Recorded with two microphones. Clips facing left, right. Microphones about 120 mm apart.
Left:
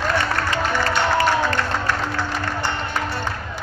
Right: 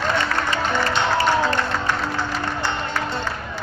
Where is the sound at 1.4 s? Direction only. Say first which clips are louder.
Even; 15° right (ahead or behind).